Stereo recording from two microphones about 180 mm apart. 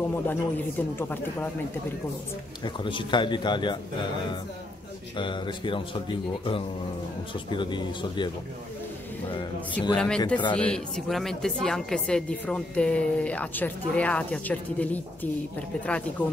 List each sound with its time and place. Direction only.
0.1 s speech: 10° left (ahead or behind)
2.6 s a man's voice: 25° left (ahead or behind)
5.1 s a man's voice: 25° left (ahead or behind)
9.9 s speech: 5° left (ahead or behind)